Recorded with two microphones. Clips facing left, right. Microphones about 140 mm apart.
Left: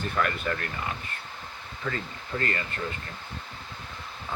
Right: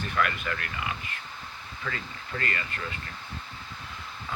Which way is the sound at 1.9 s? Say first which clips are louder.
Left 4 dB; 15° left (ahead or behind).